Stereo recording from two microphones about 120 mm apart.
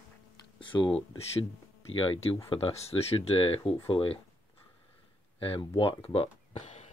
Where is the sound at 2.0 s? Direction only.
55° left (ahead or behind).